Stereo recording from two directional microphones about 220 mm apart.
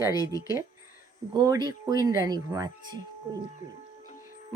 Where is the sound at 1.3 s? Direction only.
15° right (ahead or behind).